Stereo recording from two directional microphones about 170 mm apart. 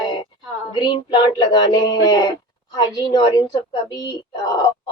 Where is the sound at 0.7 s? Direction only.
25° left (ahead or behind).